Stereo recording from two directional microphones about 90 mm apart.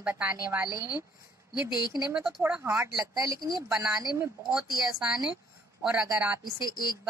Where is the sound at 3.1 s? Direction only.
40° right (ahead or behind).